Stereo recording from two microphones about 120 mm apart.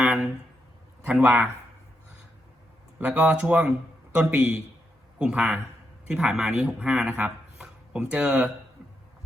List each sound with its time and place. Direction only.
0.0 s a sound: 10° right (ahead or behind)
1.0 s speech: 10° right (ahead or behind)
3.0 s speech: 10° right (ahead or behind)